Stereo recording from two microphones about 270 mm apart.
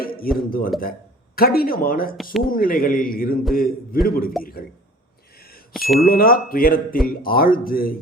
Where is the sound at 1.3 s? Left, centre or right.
Left.